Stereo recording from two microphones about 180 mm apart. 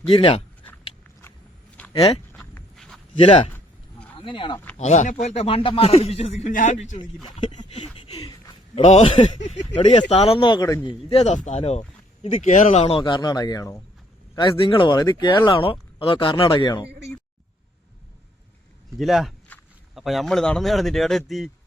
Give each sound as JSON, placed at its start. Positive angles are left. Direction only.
{"t": 0.1, "sound": "a man's voice", "side_deg": 30}
{"t": 1.9, "sound": "speech", "side_deg": 30}
{"t": 2.3, "sound": "a sound", "side_deg": 5}
{"t": 3.2, "sound": "speech", "side_deg": 30}
{"t": 4.5, "sound": "speech", "side_deg": 10}
{"t": 4.8, "sound": "a man's voice", "side_deg": 40}
{"t": 7.9, "sound": "a man's voice", "side_deg": 30}
{"t": 9.4, "sound": "a man's voice", "side_deg": 40}
{"t": 10.8, "sound": "a man's voice", "side_deg": 35}
{"t": 18.9, "sound": "speech", "side_deg": 0}